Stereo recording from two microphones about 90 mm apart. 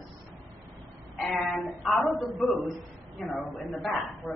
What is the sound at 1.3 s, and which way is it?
A woman's voice, centre (ahead or behind).